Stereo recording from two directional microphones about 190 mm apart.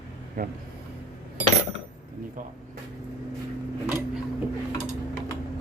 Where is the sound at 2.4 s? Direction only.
45° right (ahead or behind).